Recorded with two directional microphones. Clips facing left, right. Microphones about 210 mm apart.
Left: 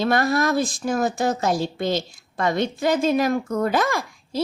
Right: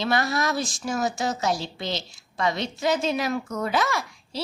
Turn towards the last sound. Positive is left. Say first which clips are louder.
# left 4 dB
turn(degrees=50)  # may be behind; listen again after turning